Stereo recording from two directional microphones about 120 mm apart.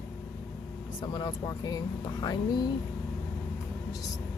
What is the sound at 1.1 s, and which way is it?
Speech, 30° left (ahead or behind).